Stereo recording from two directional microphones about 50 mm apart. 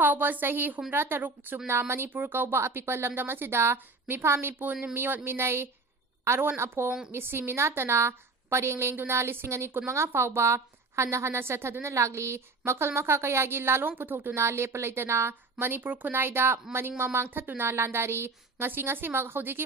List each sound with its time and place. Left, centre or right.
0.0 s a woman's voice: right
1.7 s a woman's voice: right
2.1 s a woman's voice: right
14.3 s a woman's voice: right
15.6 s speech: right